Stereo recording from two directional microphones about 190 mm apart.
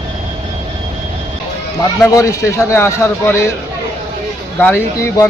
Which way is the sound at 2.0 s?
15° left (ahead or behind).